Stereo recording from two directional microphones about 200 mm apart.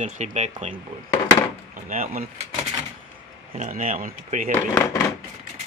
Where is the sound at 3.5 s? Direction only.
40° right (ahead or behind).